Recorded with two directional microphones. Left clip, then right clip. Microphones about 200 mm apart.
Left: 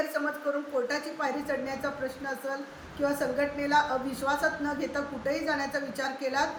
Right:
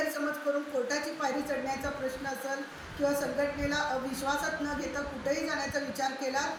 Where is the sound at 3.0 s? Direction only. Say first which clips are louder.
Left 1 dB; 25° left (ahead or behind).